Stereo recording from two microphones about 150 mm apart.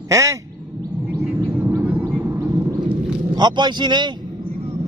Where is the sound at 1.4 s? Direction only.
15° right (ahead or behind).